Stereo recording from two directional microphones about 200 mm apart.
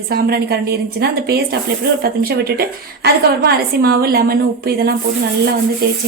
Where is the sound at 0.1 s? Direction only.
50° right (ahead or behind).